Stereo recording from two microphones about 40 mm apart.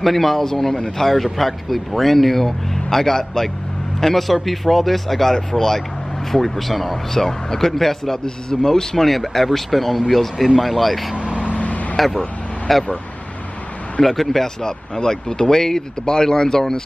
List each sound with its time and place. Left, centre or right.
0.0 s speech: centre
10.3 s speech: centre
10.6 s speech: centre
11.1 s vehicle: right
11.5 s vehicle: left
12.7 s speech: centre
14.0 s speech: centre